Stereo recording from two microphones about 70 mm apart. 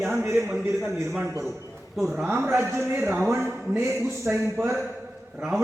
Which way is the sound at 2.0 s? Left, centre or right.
Centre.